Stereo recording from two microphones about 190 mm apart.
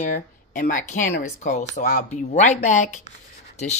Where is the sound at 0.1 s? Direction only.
40° left (ahead or behind).